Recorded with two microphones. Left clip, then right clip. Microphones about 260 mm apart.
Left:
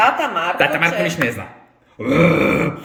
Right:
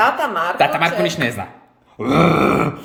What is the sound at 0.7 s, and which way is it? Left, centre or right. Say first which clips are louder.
Speech: even; centre.